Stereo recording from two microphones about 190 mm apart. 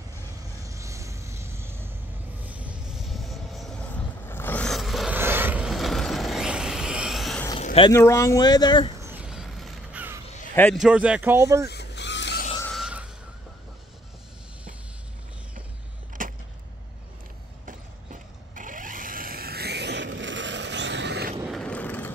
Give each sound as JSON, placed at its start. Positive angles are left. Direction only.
{"t": 0.7, "sound": "vehicle", "side_deg": -15}
{"t": 4.3, "sound": "a sound", "side_deg": 10}
{"t": 5.1, "sound": "vehicle", "side_deg": -10}
{"t": 7.6, "sound": "a sound", "side_deg": 30}
{"t": 7.9, "sound": "speech", "side_deg": 15}
{"t": 9.0, "sound": "mechanisms", "side_deg": -5}
{"t": 10.2, "sound": "a sound", "side_deg": 40}
{"t": 10.5, "sound": "a man's voice", "side_deg": 10}
{"t": 10.8, "sound": "speech", "side_deg": -5}
{"t": 11.6, "sound": "vehicle", "side_deg": 60}
{"t": 12.6, "sound": "a sound", "side_deg": 0}
{"t": 16.2, "sound": "vehicle", "side_deg": -45}
{"t": 18.5, "sound": "vehicle", "side_deg": -45}
{"t": 21.5, "sound": "vehicle", "side_deg": 5}